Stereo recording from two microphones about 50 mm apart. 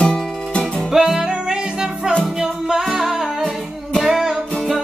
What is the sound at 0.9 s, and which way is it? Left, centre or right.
Music, centre.